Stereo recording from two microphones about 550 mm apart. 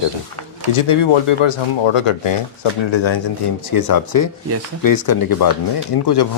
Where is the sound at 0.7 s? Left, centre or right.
Left.